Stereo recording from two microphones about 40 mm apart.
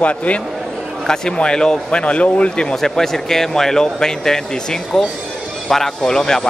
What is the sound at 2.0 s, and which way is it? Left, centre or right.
Speech, left.